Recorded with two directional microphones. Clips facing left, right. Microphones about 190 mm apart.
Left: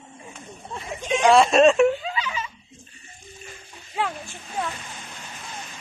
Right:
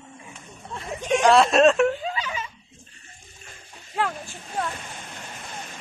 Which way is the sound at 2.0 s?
45° right (ahead or behind).